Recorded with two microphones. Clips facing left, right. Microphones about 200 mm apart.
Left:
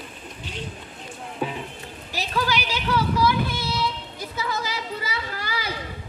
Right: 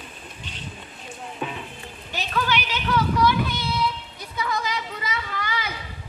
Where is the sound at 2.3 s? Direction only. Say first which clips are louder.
Even; 35° left (ahead or behind).